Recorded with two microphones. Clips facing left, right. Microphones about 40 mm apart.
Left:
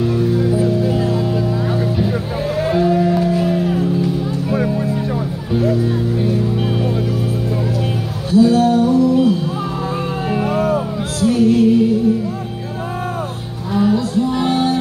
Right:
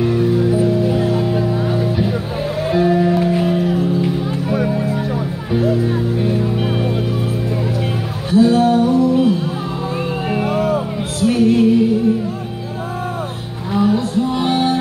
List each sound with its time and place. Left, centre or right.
0.0 s music: right
2.6 s music: centre
8.3 s music: right
10.4 s music: right
13.9 s music: right